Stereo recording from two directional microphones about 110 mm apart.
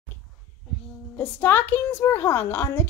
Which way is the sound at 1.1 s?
20° left (ahead or behind).